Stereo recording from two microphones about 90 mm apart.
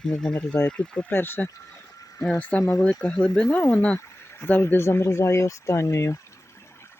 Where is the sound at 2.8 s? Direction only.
10° left (ahead or behind); by 6.2 s 30° left (ahead or behind).